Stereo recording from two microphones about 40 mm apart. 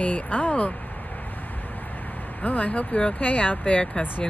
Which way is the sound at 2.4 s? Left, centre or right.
Left.